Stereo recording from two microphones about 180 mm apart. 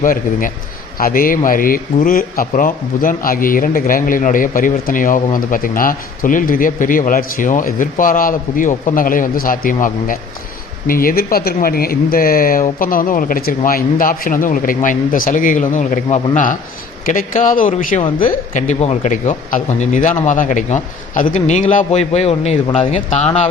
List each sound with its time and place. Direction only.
0.0 s a man's voice: 50° left (ahead or behind)